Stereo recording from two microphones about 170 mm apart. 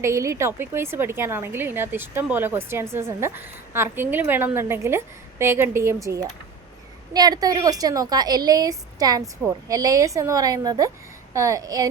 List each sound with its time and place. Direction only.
0.0 s a woman's voice: 15° right (ahead or behind)